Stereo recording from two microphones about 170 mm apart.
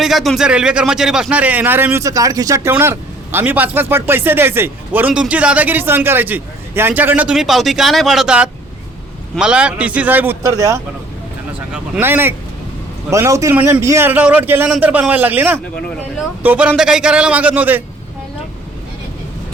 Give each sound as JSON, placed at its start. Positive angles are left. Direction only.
{"t": 0.0, "sound": "speech", "side_deg": 0}
{"t": 11.7, "sound": "speech", "side_deg": -10}